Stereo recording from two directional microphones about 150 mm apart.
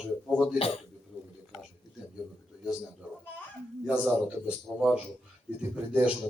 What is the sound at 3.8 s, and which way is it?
A man's voice, 5° right (ahead or behind).